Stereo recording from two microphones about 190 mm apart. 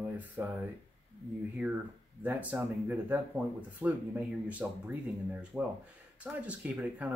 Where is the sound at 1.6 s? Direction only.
10° right (ahead or behind).